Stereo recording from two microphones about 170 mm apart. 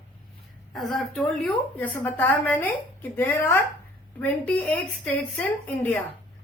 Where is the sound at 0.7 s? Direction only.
Centre (ahead or behind).